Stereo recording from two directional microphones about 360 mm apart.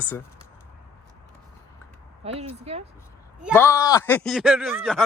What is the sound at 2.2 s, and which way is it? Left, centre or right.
Speech, centre.